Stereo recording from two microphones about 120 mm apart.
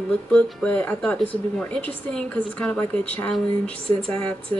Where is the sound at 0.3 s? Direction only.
10° left (ahead or behind).